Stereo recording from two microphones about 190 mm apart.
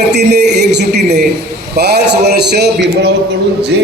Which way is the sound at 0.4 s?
60° right (ahead or behind).